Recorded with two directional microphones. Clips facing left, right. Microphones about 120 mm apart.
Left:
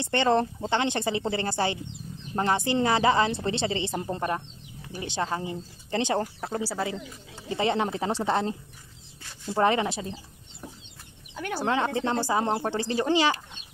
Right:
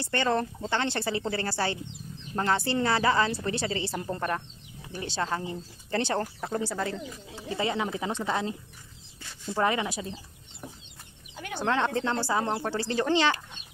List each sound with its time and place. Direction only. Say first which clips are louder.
0.0 s a woman's voice: left 4 dB; 20° left (ahead or behind)
6.4 s speech: left 1 dB; 5° left (ahead or behind)
7.5 s a woman's voice: left 3 dB; 30° left (ahead or behind)
11.3 s a sound: left 5 dB; 60° left (ahead or behind)
11.6 s speech: even; 5° left (ahead or behind)
12.4 s speech: left 2 dB; 25° left (ahead or behind); by 13.4 s 10° left (ahead or behind)